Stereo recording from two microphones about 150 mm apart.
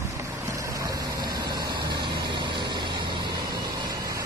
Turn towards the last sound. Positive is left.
turn(degrees=-25)  # may be behind; listen again after turning